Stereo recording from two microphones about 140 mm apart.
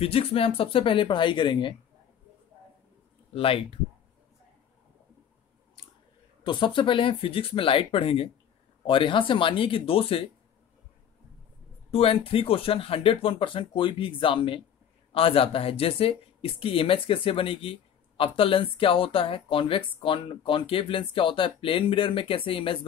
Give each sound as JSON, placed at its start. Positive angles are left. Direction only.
{"t": 0.0, "sound": "speech", "side_deg": 45}
{"t": 3.3, "sound": "speech", "side_deg": 40}
{"t": 5.8, "sound": "scissors", "side_deg": 30}
{"t": 6.4, "sound": "speech", "side_deg": 35}
{"t": 11.9, "sound": "speech", "side_deg": 45}